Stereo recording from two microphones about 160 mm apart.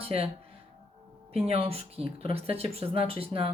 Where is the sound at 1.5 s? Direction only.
40° right (ahead or behind).